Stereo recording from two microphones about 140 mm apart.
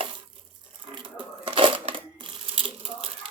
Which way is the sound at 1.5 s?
35° right (ahead or behind).